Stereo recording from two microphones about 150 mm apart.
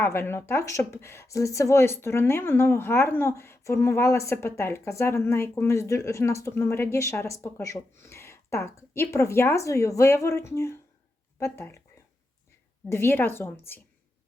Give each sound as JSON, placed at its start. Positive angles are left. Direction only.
{"t": 0.0, "sound": "speech", "side_deg": 15}
{"t": 12.9, "sound": "speech", "side_deg": 15}